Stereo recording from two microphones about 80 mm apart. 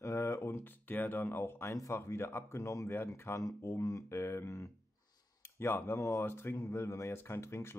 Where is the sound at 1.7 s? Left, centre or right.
Left.